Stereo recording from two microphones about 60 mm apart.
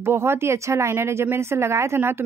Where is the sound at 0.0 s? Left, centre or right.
Right.